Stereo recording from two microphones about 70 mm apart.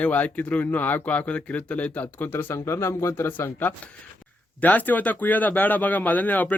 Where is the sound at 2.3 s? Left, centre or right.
Left.